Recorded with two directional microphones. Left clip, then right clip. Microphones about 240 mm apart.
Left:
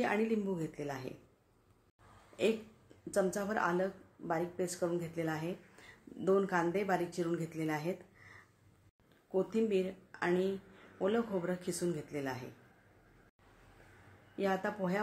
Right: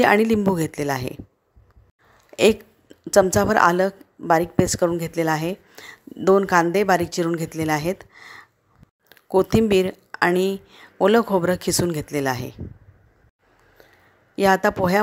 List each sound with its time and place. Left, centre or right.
0.0 s speech: right
3.1 s a woman's voice: right
14.3 s speech: right